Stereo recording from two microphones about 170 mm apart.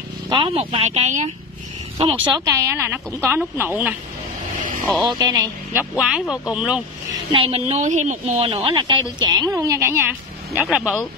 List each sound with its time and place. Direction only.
0.3 s speech: 30° right (ahead or behind)
2.0 s speech: 30° right (ahead or behind)
2.4 s speech: 15° right (ahead or behind)
5.0 s a woman's voice: 25° right (ahead or behind)
5.8 s speech: 5° right (ahead or behind)
7.3 s a woman's voice: 35° right (ahead or behind); by 10.6 s 15° right (ahead or behind)
10.6 s speech: 5° right (ahead or behind)